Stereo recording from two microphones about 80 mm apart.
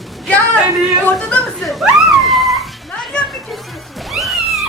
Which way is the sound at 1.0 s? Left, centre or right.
Centre.